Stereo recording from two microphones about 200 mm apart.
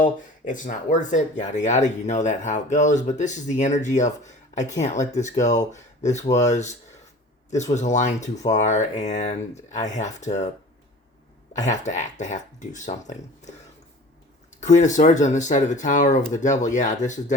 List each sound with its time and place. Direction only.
0.0 s speech: 40° left (ahead or behind)
11.5 s speech: 35° left (ahead or behind)
14.6 s speech: 35° left (ahead or behind)